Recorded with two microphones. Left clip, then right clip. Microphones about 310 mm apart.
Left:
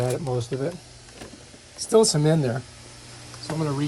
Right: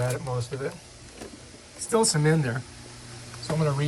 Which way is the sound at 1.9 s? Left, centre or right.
Centre.